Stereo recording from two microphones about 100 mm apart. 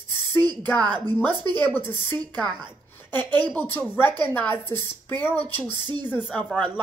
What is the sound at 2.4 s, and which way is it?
Speech, 45° right (ahead or behind).